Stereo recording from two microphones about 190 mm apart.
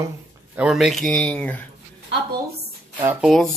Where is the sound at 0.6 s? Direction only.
5° right (ahead or behind).